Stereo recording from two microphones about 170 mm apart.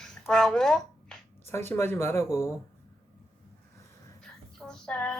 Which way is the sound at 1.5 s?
15° left (ahead or behind).